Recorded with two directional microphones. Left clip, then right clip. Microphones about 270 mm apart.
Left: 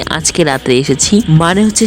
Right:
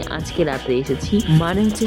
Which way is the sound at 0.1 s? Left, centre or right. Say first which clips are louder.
Left 9 dB; left.